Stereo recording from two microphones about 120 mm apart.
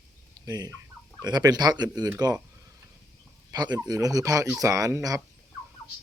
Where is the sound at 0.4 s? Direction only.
35° right (ahead or behind).